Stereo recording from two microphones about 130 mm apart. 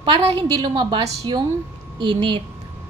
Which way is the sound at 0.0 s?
50° right (ahead or behind).